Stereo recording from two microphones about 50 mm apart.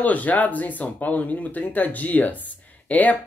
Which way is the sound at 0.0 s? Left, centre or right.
Left.